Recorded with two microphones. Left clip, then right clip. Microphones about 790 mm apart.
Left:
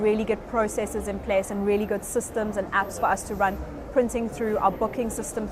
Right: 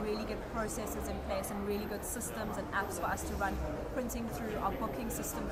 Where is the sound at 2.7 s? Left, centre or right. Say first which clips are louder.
Left 12 dB; left.